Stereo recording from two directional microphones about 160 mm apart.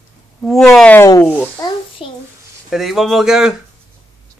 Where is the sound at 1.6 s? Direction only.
35° left (ahead or behind).